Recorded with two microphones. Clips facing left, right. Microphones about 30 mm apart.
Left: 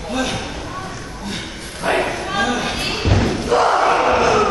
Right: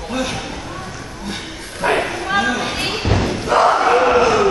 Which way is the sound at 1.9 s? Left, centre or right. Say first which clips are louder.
Right 1 dB; centre.